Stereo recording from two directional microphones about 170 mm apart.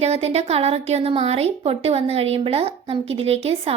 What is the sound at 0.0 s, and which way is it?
A woman's voice, 40° right (ahead or behind).